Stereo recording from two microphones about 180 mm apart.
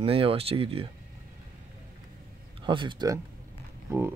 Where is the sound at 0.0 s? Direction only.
30° right (ahead or behind).